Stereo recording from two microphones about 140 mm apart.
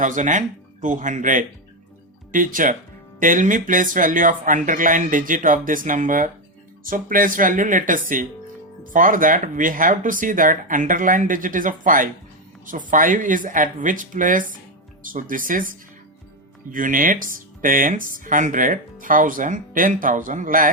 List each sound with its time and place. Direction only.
0.0 s speech: 65° right (ahead or behind)
16.7 s speech: 75° right (ahead or behind)